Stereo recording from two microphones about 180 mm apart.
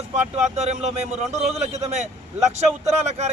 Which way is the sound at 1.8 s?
40° right (ahead or behind).